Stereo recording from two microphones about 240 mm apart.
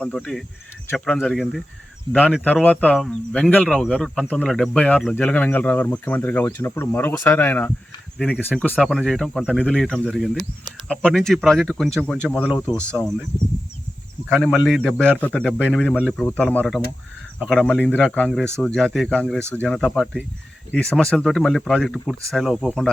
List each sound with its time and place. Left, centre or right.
0.0 s speech: centre
14.3 s speech: centre
15.6 s speech: centre